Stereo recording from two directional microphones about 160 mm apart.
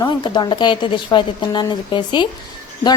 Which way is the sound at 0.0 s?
30° left (ahead or behind).